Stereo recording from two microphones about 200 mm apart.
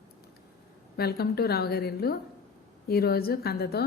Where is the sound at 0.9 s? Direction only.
50° left (ahead or behind).